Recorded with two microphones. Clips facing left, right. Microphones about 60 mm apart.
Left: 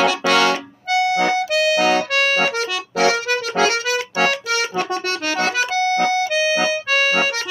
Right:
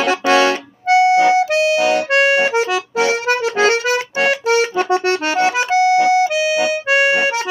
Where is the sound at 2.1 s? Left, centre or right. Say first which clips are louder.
Right 5 dB; right.